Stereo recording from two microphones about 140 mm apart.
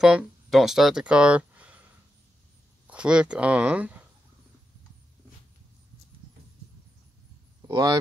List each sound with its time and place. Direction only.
0.0 s speech: 5° right (ahead or behind)
2.9 s speech: 5° right (ahead or behind)
7.6 s speech: 25° right (ahead or behind)